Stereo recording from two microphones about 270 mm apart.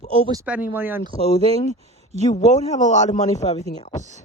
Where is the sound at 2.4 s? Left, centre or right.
Left.